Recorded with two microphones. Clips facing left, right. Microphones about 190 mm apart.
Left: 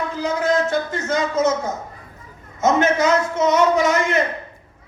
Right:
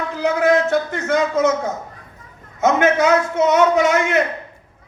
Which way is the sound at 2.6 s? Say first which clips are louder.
Right 2 dB; 60° right (ahead or behind).